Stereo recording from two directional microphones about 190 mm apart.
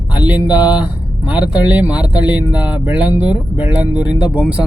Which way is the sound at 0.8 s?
5° right (ahead or behind).